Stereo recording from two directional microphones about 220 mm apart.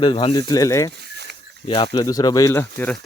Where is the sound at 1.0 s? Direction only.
50° right (ahead or behind).